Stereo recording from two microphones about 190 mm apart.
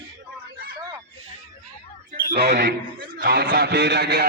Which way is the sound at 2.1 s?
55° right (ahead or behind).